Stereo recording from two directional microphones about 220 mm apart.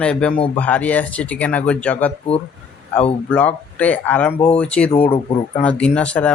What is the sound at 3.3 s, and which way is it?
A man's voice, 5° left (ahead or behind).